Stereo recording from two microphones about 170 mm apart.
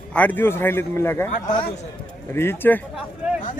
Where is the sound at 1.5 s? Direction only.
45° left (ahead or behind).